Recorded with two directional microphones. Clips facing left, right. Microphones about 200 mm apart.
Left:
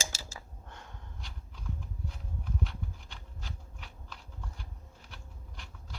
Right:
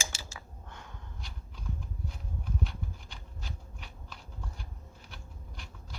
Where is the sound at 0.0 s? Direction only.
40° left (ahead or behind).